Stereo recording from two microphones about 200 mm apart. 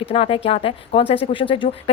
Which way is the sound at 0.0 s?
30° left (ahead or behind).